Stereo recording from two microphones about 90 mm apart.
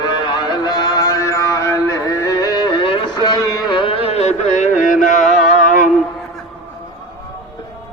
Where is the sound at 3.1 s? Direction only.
50° left (ahead or behind).